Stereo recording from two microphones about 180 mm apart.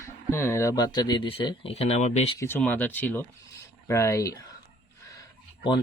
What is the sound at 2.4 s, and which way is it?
Speech, 10° left (ahead or behind).